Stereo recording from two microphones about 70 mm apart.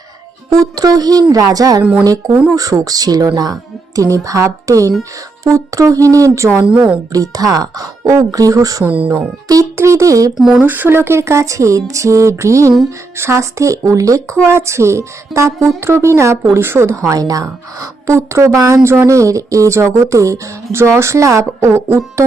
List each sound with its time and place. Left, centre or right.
0.5 s speech: right
1.8 s speech: centre
2.6 s a woman's voice: right
7.1 s speech: right
8.8 s speech: right
9.7 s a woman's voice: right
10.3 s speech: centre
10.6 s a woman's voice: right
14.4 s speech: right
17.1 s a woman's voice: right